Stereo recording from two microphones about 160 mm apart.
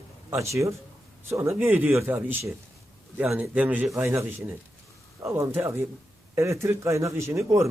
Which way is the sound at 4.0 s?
15° right (ahead or behind).